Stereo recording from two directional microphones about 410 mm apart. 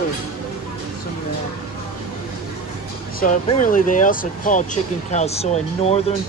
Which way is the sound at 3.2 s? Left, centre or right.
Centre.